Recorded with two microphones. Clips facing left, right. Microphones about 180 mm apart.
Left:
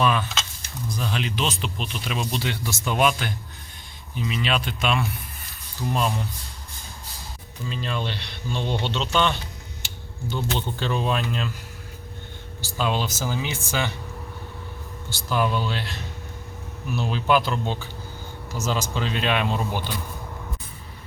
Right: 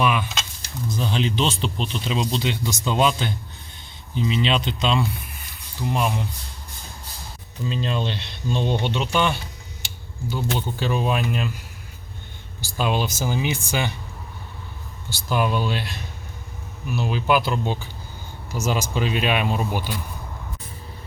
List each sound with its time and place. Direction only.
0.0 s speech: 10° right (ahead or behind)
0.9 s speech: 25° right (ahead or behind)
7.7 s speech: 20° right (ahead or behind)
12.6 s speech: 15° right (ahead or behind)
15.1 s speech: 15° right (ahead or behind)